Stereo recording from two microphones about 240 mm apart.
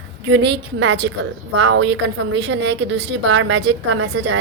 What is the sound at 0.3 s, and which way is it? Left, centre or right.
A woman's voice, right.